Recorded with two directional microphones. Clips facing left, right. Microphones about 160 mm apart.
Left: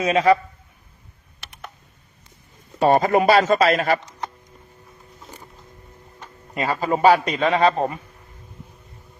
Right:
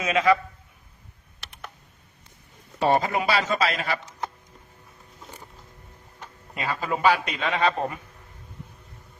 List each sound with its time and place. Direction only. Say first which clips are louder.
0.0 s a man's voice: left 4 dB; 35° left (ahead or behind)
1.4 s computer keyboard: left 2 dB; centre (ahead or behind)
2.8 s a man's voice: left 6 dB; 50° left (ahead or behind)
6.5 s a man's voice: left 6 dB; 40° left (ahead or behind)